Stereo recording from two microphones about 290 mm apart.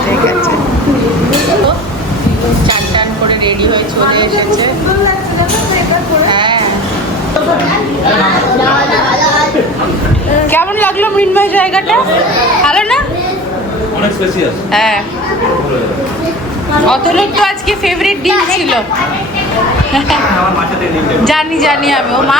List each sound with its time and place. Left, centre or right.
2.6 s speech: centre
6.3 s speech: centre
10.5 s a woman's voice: centre
14.7 s speech: centre
16.8 s a woman's voice: centre
21.2 s a woman's voice: centre